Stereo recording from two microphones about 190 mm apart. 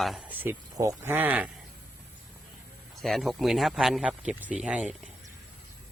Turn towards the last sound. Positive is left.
turn(degrees=-5)  # may be behind; listen again after turning